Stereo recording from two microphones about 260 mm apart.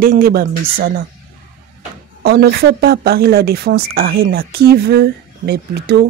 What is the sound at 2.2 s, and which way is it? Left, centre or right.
A woman's voice, right.